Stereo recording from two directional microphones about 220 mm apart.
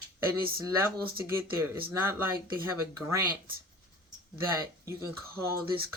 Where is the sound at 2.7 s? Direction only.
15° right (ahead or behind).